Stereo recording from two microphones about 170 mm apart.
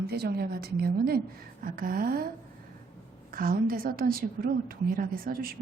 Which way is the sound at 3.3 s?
60° right (ahead or behind).